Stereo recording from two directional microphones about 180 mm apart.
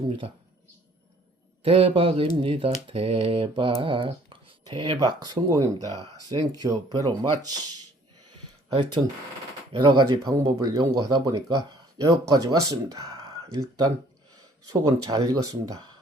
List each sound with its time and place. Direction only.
1.6 s speech: 30° right (ahead or behind)
9.0 s speech: 15° right (ahead or behind)
9.7 s speech: 25° right (ahead or behind)